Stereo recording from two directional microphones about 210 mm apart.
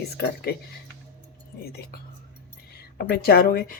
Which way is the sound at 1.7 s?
50° left (ahead or behind).